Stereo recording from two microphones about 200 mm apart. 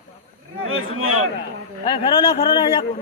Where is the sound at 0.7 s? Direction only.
90° right.